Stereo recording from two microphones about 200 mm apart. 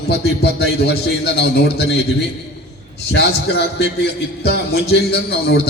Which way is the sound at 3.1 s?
55° left (ahead or behind).